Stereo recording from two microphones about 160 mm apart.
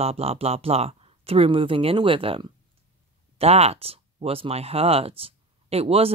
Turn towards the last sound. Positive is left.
turn(degrees=-40)  # may be behind; listen again after turning